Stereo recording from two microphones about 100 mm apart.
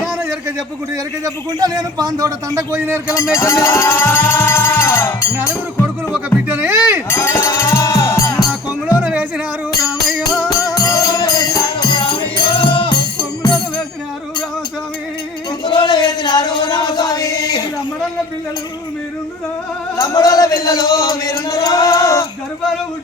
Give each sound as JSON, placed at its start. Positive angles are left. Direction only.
{"t": 1.2, "sound": "a man's voice", "side_deg": -40}
{"t": 3.3, "sound": "music", "side_deg": 30}
{"t": 6.1, "sound": "music", "side_deg": -15}
{"t": 7.1, "sound": "music", "side_deg": 25}
{"t": 9.0, "sound": "music", "side_deg": -15}
{"t": 10.1, "sound": "music", "side_deg": 0}
{"t": 10.8, "sound": "music", "side_deg": 40}
{"t": 15.6, "sound": "chant", "side_deg": 50}
{"t": 20.0, "sound": "a sound", "side_deg": 35}